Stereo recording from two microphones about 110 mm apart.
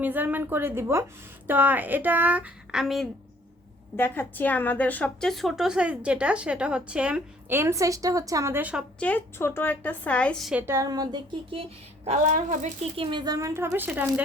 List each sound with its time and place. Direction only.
0.0 s a woman's voice: 15° right (ahead or behind)
2.8 s a woman's voice: centre (ahead or behind)
3.9 s a woman's voice: 20° left (ahead or behind)
5.3 s speech: centre (ahead or behind)
7.5 s a woman's voice: 25° right (ahead or behind)
8.5 s speech: 15° right (ahead or behind)
9.0 s a woman's voice: 15° left (ahead or behind)
10.5 s a woman's voice: 20° right (ahead or behind)
10.8 s a woman's voice: 35° right (ahead or behind)
12.0 s a woman's voice: 90° right
13.0 s a woman's voice: 45° right (ahead or behind)
13.5 s speech: 20° right (ahead or behind)